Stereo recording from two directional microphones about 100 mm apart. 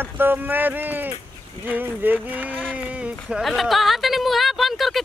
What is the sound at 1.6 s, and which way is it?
Speech, 20° right (ahead or behind).